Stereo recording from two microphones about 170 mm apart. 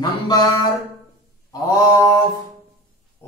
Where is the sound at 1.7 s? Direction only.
20° left (ahead or behind).